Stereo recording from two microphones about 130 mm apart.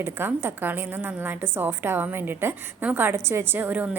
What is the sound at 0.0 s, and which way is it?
A woman's voice, 15° right (ahead or behind).